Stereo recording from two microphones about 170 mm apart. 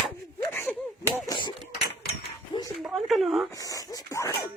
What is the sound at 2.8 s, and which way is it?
Speech, centre (ahead or behind).